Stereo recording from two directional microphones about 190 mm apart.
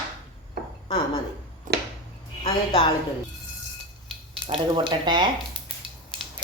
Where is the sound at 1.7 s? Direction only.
45° right (ahead or behind).